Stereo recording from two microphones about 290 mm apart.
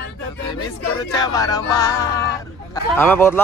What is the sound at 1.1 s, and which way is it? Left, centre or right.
Speech, centre.